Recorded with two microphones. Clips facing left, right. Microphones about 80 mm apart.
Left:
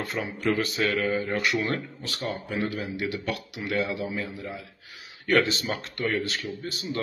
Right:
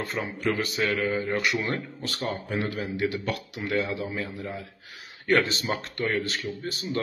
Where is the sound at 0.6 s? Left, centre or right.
Right.